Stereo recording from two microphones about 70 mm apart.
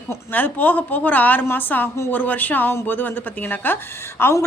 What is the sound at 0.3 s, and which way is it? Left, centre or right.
A woman's voice, left.